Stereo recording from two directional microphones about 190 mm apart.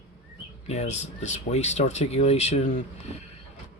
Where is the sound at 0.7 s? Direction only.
35° left (ahead or behind).